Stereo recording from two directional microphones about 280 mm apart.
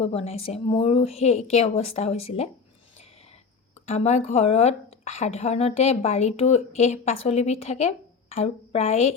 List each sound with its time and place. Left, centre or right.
0.0 s a woman's voice: left
3.8 s a woman's voice: left